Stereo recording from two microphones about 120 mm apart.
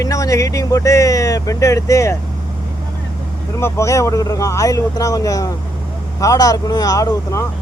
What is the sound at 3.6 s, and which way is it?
Speech, 25° left (ahead or behind).